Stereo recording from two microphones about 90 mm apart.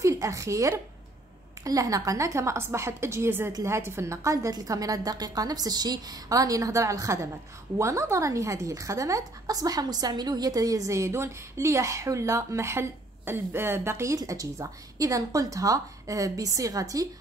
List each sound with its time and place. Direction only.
0.0 s a woman's voice: 35° right (ahead or behind)